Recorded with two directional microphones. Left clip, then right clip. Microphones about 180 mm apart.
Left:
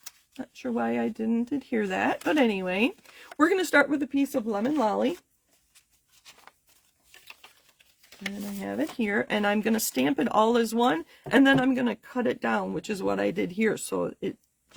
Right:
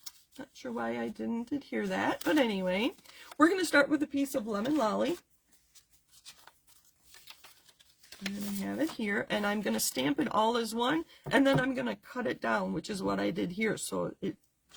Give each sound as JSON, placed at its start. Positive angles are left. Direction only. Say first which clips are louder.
{"t": 0.0, "sound": "speech", "louder": "left 5 dB", "side_deg": 45}
{"t": 6.2, "sound": "a sound", "louder": "left 2 dB", "side_deg": 15}
{"t": 8.6, "sound": "speech", "louder": "left 4 dB", "side_deg": 45}